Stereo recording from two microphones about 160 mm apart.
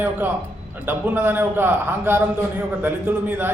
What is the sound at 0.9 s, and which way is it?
A man's voice, 10° right (ahead or behind).